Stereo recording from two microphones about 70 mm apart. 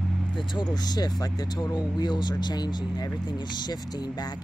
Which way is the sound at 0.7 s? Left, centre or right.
Left.